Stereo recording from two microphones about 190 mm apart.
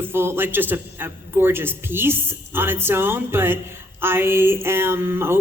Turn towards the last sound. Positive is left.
turn(degrees=-10)  # may be behind; listen again after turning